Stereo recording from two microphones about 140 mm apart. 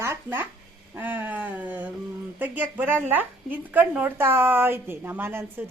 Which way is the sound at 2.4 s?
15° right (ahead or behind).